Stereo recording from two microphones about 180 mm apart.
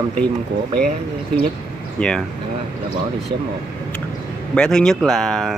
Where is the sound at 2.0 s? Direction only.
5° left (ahead or behind).